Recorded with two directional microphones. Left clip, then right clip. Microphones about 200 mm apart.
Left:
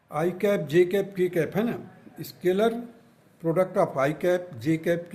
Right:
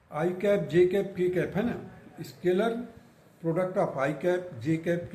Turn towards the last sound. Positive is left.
turn(degrees=60)  # may be behind; listen again after turning